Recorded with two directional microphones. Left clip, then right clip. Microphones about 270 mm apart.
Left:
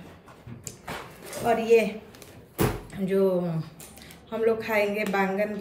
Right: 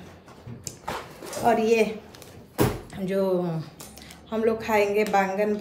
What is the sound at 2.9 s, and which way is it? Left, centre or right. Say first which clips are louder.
Door: left 1 dB; centre.